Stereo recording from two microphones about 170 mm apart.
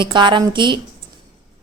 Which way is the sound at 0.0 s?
25° right (ahead or behind).